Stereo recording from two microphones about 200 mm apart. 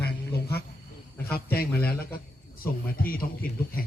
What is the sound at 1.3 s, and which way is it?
A man's voice, 50° left (ahead or behind).